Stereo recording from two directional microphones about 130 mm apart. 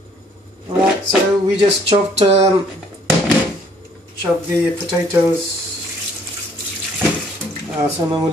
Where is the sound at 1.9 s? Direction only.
50° right (ahead or behind).